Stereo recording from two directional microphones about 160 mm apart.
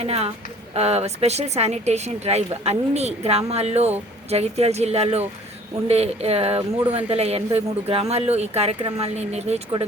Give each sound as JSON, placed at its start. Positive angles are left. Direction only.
{"t": 0.0, "sound": "speech", "side_deg": -40}